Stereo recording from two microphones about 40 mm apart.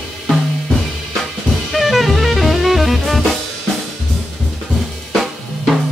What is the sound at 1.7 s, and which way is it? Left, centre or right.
Drum kit, centre.